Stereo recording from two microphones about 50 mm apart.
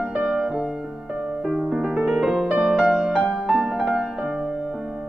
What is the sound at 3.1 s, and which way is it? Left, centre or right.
Music, centre.